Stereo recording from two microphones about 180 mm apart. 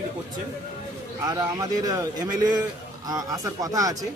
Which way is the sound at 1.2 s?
20° right (ahead or behind).